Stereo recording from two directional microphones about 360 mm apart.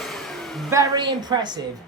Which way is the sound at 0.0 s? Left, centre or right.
Centre.